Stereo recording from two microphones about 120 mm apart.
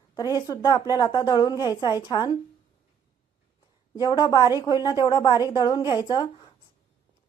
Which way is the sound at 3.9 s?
35° left (ahead or behind).